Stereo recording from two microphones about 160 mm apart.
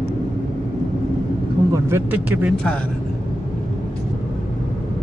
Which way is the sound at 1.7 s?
20° right (ahead or behind).